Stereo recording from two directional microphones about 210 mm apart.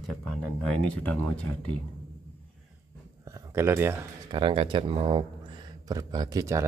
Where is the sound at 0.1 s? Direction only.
5° left (ahead or behind).